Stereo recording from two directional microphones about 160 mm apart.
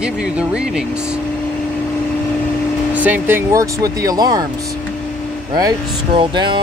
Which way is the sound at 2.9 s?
10° right (ahead or behind).